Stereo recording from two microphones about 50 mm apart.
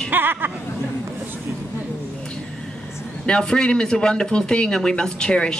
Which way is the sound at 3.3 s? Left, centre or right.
Centre.